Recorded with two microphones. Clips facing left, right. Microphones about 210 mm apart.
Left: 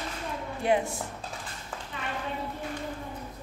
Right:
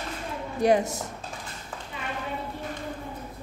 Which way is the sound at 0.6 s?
40° right (ahead or behind).